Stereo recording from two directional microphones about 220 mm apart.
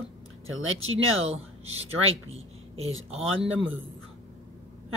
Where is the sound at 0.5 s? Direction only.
65° right (ahead or behind).